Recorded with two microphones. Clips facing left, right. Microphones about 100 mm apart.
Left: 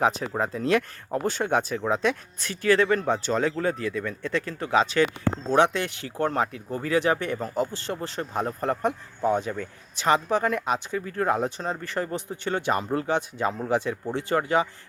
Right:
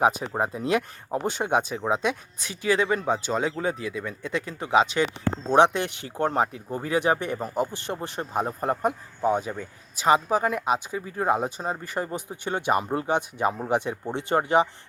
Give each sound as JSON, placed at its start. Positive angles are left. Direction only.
{"t": 0.0, "sound": "speech", "side_deg": -10}